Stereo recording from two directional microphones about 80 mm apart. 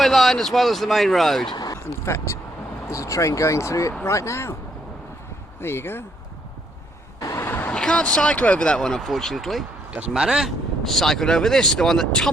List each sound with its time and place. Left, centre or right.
0.0 s speech: centre
1.7 s speech: left
5.5 s speech: left
7.3 s vehicle: left
7.7 s speech: centre